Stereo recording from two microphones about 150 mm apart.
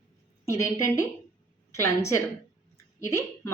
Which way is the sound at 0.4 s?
20° left (ahead or behind).